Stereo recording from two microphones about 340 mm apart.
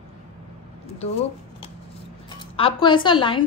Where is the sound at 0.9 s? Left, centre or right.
Centre.